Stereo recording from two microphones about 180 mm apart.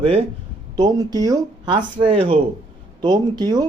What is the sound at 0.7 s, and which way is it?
Speech, 20° right (ahead or behind).